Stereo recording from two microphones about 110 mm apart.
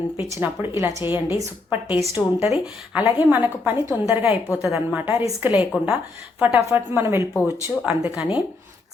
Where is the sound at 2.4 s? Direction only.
5° right (ahead or behind).